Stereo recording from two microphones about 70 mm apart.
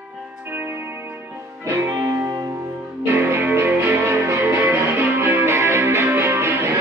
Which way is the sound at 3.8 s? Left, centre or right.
Right.